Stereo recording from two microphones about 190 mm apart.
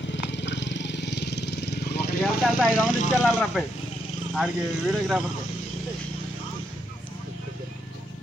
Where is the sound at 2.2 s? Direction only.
Centre (ahead or behind).